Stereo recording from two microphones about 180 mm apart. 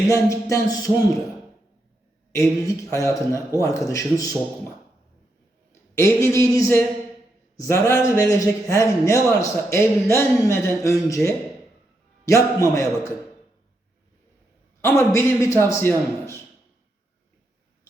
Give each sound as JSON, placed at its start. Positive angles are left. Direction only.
{"t": 0.1, "sound": "speech", "side_deg": 15}
{"t": 2.6, "sound": "speech", "side_deg": 15}
{"t": 5.9, "sound": "speech", "side_deg": 15}
{"t": 14.8, "sound": "speech", "side_deg": 15}